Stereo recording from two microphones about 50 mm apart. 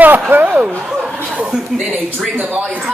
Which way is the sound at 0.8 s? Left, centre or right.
Centre.